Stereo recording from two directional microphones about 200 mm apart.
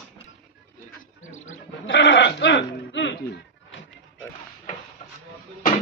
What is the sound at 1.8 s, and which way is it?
Goat, 65° left (ahead or behind).